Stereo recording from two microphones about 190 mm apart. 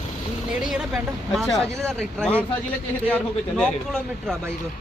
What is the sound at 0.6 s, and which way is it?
A man's voice, 5° right (ahead or behind).